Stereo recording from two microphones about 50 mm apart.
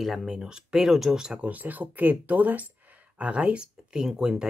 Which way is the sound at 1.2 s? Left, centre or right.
Right.